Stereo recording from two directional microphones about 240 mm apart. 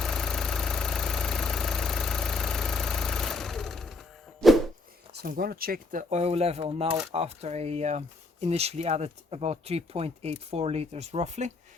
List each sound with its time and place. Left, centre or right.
0.0 s engine: centre
5.2 s speech: right